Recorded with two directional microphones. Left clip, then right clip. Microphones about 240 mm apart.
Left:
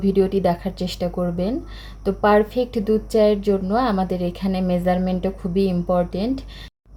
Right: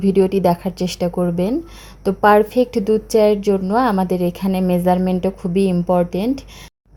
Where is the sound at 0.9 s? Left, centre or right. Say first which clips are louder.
Right 4 dB; right.